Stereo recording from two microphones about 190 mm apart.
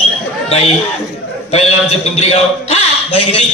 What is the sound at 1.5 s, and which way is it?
A man's voice, 35° left (ahead or behind).